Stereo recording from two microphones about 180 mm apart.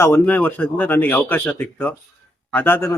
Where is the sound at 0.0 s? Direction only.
10° left (ahead or behind).